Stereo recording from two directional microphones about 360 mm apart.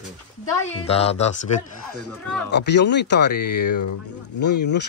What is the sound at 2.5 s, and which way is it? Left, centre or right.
Speech, left.